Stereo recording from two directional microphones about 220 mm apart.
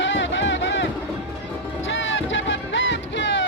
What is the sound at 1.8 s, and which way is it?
Music, 60° left (ahead or behind).